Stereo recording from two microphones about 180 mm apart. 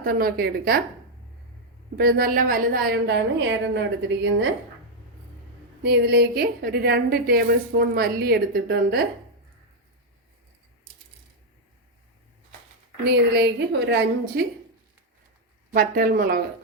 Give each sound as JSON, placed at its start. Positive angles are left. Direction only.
{"t": 0.0, "sound": "a woman's voice", "side_deg": -55}
{"t": 2.0, "sound": "a woman's voice", "side_deg": -55}
{"t": 5.8, "sound": "a woman's voice", "side_deg": -65}
{"t": 13.1, "sound": "a woman's voice", "side_deg": -65}
{"t": 15.7, "sound": "speech", "side_deg": -50}